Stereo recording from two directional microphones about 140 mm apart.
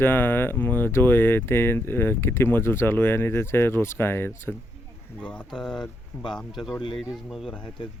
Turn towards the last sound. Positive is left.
turn(degrees=0)  # may be behind; listen again after turning